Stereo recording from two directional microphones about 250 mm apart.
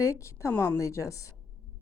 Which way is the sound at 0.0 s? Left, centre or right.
Centre.